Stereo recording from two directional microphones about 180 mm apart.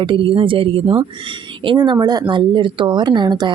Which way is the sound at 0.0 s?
30° right (ahead or behind).